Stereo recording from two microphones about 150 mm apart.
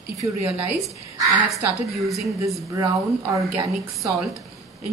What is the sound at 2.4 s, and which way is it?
A woman's voice, 20° right (ahead or behind).